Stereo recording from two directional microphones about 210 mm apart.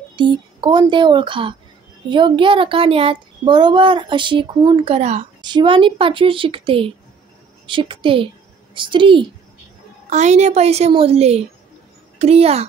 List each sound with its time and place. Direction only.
0.1 s a woman's voice: 20° right (ahead or behind)